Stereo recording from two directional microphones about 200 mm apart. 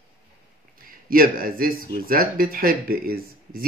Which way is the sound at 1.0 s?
45° right (ahead or behind).